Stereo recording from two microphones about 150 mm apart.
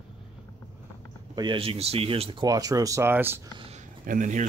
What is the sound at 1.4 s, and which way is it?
Speech, 35° right (ahead or behind).